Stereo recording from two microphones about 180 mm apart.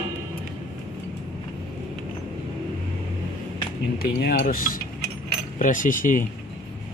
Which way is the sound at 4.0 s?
50° left (ahead or behind).